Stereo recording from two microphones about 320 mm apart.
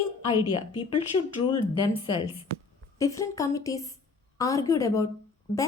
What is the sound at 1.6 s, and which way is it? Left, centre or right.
Speech, centre.